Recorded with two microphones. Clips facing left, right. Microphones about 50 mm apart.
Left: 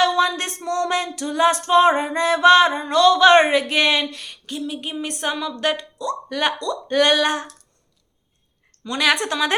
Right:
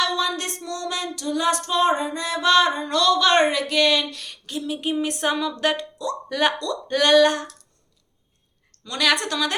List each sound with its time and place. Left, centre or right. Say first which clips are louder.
0.0 s a sound: left 5 dB; left
0.6 s music: left 7 dB; left; by 4.3 s centre
4.3 s speech: even; centre
8.8 s speech: left 2 dB; centre